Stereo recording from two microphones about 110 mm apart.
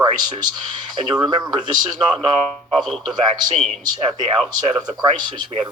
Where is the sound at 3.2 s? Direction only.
40° right (ahead or behind).